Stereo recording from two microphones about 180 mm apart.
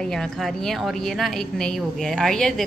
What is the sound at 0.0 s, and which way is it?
A woman's voice, 5° left (ahead or behind).